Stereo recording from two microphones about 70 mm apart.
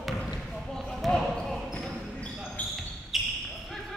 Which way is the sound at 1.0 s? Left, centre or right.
Centre.